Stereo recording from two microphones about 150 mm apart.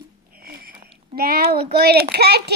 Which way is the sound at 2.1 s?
90° right.